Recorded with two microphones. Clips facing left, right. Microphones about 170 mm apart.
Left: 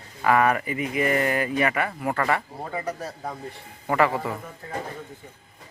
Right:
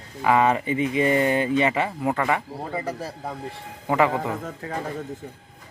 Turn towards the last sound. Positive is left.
turn(degrees=-75)  # may be behind; listen again after turning